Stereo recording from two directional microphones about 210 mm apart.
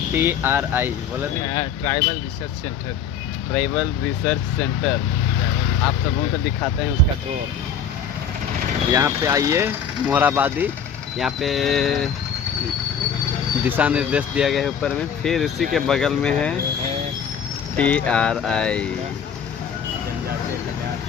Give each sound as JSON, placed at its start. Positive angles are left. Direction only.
{"t": 0.1, "sound": "speech", "side_deg": -10}
{"t": 1.5, "sound": "speech", "side_deg": 15}
{"t": 3.5, "sound": "speech", "side_deg": 0}
{"t": 8.9, "sound": "speech", "side_deg": -15}
{"t": 13.7, "sound": "speech", "side_deg": -5}
{"t": 17.7, "sound": "speech", "side_deg": 5}